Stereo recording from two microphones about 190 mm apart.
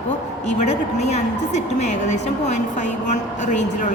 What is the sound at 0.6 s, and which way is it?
A woman's voice, 35° left (ahead or behind).